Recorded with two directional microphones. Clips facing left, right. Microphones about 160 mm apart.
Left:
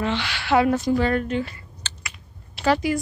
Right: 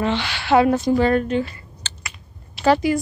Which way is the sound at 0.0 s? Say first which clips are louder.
Right 3 dB; 30° right (ahead or behind).